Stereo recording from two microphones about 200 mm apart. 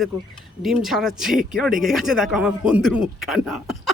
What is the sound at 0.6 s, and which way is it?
Speech, centre (ahead or behind).